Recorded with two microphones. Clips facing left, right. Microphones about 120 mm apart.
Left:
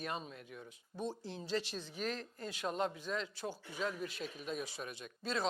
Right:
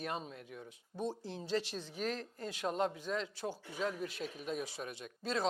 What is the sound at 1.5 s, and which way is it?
A man's voice, 60° right (ahead or behind).